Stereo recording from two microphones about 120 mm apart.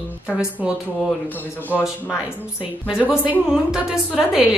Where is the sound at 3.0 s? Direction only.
10° right (ahead or behind).